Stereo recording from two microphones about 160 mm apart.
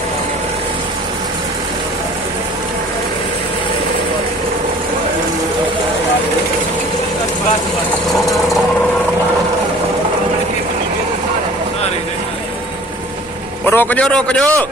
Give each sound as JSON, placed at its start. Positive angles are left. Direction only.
{"t": 13.7, "sound": "a man's voice", "side_deg": 10}